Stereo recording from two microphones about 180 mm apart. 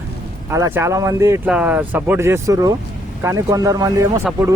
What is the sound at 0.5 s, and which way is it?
Speech, 15° right (ahead or behind).